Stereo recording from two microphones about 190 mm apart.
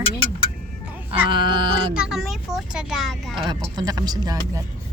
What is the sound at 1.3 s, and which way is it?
Speech, 25° right (ahead or behind).